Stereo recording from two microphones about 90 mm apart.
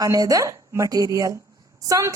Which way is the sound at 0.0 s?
40° right (ahead or behind).